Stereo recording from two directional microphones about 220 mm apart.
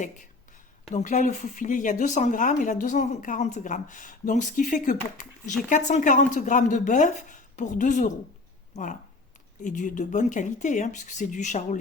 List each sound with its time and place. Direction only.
0.9 s speech: 35° left (ahead or behind)